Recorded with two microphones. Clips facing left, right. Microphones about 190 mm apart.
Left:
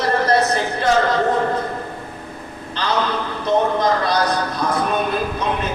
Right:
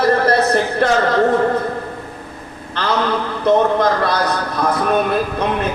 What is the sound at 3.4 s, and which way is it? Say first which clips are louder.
A man's voice: right 4 dB; 55° right (ahead or behind).